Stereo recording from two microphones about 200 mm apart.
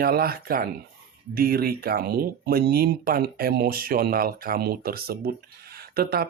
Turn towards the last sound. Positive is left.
turn(degrees=-50)  # may be behind; listen again after turning